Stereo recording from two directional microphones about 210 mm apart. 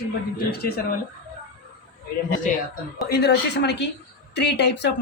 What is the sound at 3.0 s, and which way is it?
A woman's voice, 50° left (ahead or behind).